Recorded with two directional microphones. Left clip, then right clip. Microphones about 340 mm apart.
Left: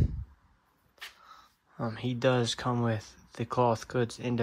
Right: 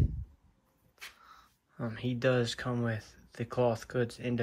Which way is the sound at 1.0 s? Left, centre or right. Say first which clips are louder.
Left 3 dB; centre.